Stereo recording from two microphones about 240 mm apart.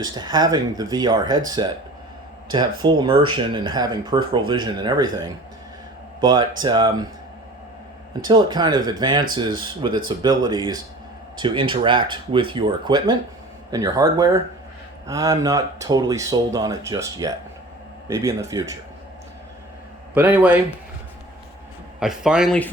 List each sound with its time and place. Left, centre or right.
0.0 s speech: centre
8.2 s speech: centre
20.1 s speech: centre
22.0 s speech: centre